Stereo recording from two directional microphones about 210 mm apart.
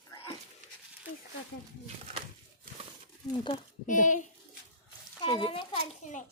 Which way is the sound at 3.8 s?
35° left (ahead or behind).